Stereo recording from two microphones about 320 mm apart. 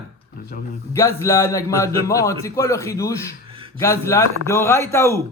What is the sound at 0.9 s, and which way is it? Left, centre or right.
Speech, centre.